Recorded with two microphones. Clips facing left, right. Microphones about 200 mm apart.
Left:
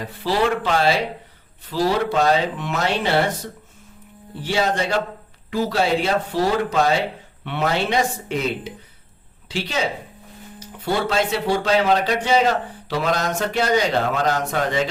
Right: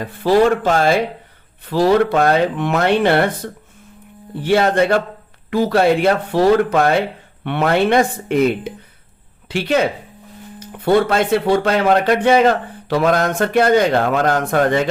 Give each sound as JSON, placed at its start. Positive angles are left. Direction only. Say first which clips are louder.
{"t": 0.0, "sound": "speech", "louder": "right 7 dB", "side_deg": -50}